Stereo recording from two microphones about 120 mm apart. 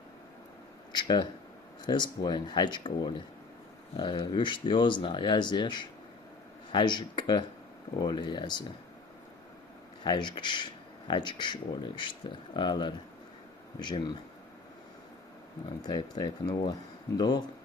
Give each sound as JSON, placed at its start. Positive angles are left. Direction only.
{"t": 0.9, "sound": "speech", "side_deg": 40}
{"t": 10.0, "sound": "speech", "side_deg": 40}
{"t": 15.8, "sound": "speech", "side_deg": 35}